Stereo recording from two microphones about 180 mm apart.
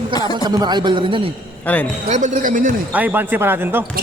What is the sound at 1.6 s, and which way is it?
Speech, 10° left (ahead or behind).